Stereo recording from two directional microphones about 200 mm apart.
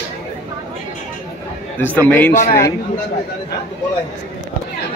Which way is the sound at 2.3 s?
40° left (ahead or behind).